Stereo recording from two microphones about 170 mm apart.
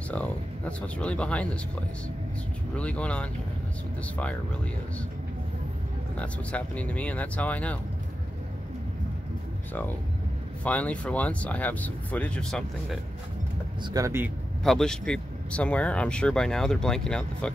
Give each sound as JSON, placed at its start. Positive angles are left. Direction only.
{"t": 0.1, "sound": "speech", "side_deg": 10}
{"t": 2.7, "sound": "speech", "side_deg": 5}
{"t": 6.1, "sound": "speech", "side_deg": 10}
{"t": 10.6, "sound": "speech", "side_deg": 10}
{"t": 13.8, "sound": "speech", "side_deg": -20}
{"t": 14.6, "sound": "speech", "side_deg": 0}